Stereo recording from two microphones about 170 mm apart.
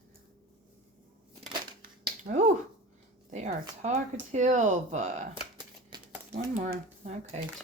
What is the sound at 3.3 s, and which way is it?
Speech, 45° right (ahead or behind).